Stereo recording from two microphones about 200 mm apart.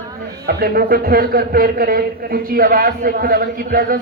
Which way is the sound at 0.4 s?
50° right (ahead or behind).